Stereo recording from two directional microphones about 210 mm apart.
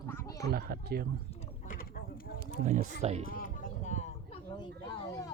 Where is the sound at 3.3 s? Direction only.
40° left (ahead or behind); by 5.3 s 15° left (ahead or behind).